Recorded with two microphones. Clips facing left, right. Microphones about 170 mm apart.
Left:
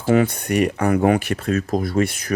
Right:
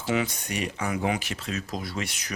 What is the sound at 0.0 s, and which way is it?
Speech, 50° left (ahead or behind).